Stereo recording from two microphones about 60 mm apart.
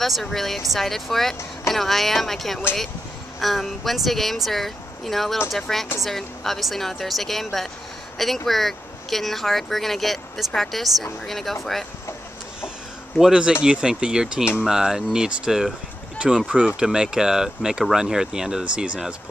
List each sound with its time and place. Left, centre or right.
0.0 s speech: centre
13.2 s speech: centre